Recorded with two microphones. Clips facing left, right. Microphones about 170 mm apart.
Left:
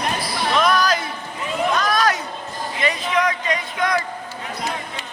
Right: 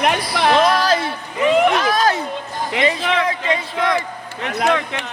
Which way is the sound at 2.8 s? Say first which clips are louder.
Right 5 dB; 80° right.